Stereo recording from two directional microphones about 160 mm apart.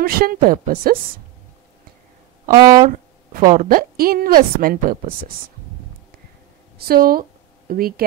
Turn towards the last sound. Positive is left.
turn(degrees=-65)  # may be behind; listen again after turning